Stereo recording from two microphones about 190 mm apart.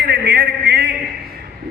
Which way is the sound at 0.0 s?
55° right (ahead or behind).